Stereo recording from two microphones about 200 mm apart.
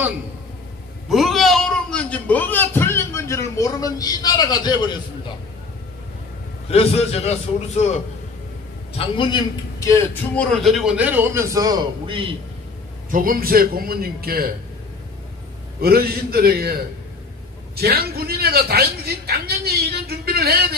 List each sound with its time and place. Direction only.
1.0 s speech: centre (ahead or behind); by 4.9 s 20° left (ahead or behind)
6.7 s a man's voice: 30° left (ahead or behind)
10.5 s a man's voice: centre (ahead or behind); by 12.3 s 20° right (ahead or behind)
13.1 s a woman's voice: 45° right (ahead or behind)
15.8 s a woman's voice: 50° right (ahead or behind)